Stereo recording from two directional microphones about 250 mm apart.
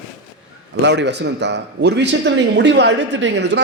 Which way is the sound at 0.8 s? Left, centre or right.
Right.